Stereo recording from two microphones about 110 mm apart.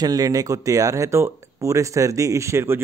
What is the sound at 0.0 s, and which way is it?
Speech, 35° right (ahead or behind).